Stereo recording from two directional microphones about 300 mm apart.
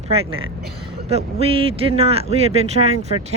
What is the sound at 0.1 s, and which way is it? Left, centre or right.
Speech, centre.